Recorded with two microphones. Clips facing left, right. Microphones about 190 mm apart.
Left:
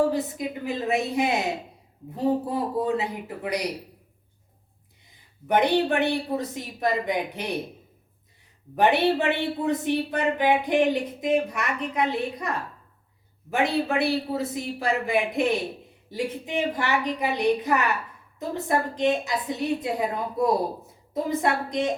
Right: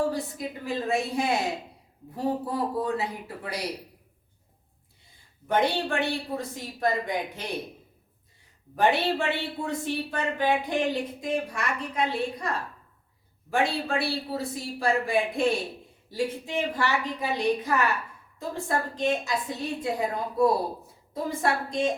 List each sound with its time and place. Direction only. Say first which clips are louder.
0.1 s speech: left 4 dB; 20° left (ahead or behind)
5.5 s speech: left 4 dB; 20° left (ahead or behind)
8.7 s speech: left 3 dB; 20° left (ahead or behind)